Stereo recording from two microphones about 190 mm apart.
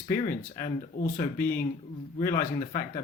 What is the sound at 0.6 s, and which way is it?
Speech, 50° left (ahead or behind).